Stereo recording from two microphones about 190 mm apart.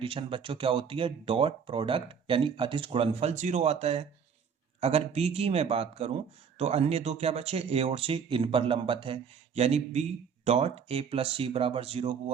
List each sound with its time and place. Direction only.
0.0 s speech: 25° right (ahead or behind)